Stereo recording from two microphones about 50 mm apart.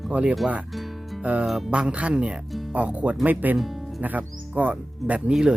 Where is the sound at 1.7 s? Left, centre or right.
Right.